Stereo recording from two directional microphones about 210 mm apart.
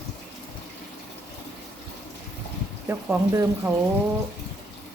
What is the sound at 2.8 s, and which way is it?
Speech, 10° right (ahead or behind).